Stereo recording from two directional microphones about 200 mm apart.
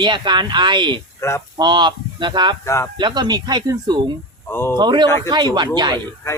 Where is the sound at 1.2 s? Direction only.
15° left (ahead or behind).